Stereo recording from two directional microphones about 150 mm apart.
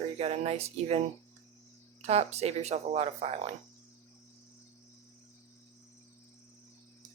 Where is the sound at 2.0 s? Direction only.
45° right (ahead or behind).